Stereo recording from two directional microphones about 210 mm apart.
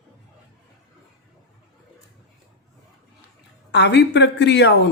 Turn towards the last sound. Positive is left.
turn(degrees=55)  # may be behind; listen again after turning